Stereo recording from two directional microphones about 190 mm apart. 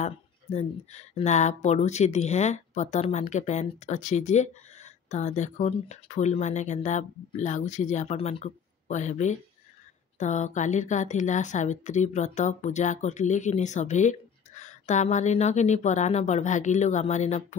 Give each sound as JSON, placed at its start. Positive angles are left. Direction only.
{"t": 0.0, "sound": "speech", "side_deg": 35}